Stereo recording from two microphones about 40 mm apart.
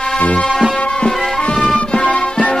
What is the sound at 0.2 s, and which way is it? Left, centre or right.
Music, left.